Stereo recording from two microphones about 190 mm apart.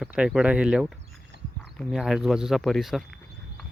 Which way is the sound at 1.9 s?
Centre (ahead or behind).